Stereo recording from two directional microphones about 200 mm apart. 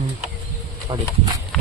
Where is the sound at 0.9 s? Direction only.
20° right (ahead or behind).